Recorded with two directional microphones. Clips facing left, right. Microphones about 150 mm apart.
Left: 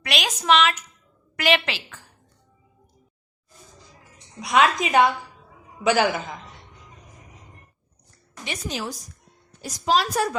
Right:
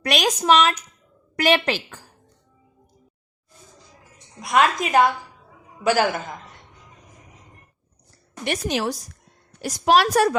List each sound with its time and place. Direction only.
0.0 s a woman's voice: 40° right (ahead or behind)
4.4 s a woman's voice: centre (ahead or behind)
8.4 s a woman's voice: 70° right (ahead or behind)